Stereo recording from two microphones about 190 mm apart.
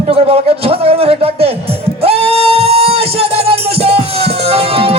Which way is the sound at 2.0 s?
30° right (ahead or behind).